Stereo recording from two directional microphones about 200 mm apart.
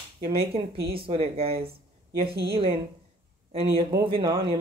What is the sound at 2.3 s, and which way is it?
Speech, 50° right (ahead or behind).